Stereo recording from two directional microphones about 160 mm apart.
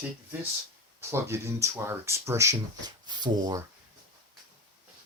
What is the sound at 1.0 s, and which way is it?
Speech, 15° right (ahead or behind).